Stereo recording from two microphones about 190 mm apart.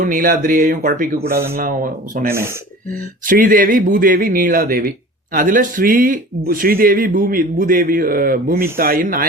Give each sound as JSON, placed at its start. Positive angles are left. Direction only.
{"t": 0.0, "sound": "a man's voice", "side_deg": -45}
{"t": 2.3, "sound": "speech", "side_deg": -15}
{"t": 3.2, "sound": "a man's voice", "side_deg": -45}